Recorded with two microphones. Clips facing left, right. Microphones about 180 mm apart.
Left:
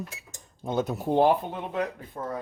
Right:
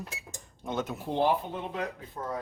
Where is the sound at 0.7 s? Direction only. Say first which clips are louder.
Left 6 dB; 40° left (ahead or behind).